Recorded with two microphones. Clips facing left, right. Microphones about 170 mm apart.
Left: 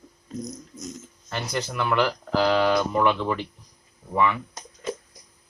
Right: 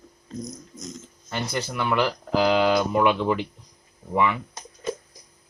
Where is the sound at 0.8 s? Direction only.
5° left (ahead or behind); by 4.4 s 15° right (ahead or behind).